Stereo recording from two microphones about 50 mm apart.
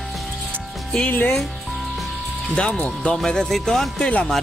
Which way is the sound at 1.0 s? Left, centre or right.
Left.